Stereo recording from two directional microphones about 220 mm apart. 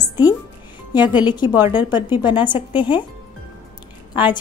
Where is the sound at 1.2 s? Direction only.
20° left (ahead or behind).